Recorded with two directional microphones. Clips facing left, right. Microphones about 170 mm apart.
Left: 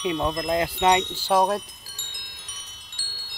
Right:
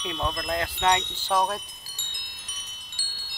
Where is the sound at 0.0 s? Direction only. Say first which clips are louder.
Left 5 dB; 15° left (ahead or behind).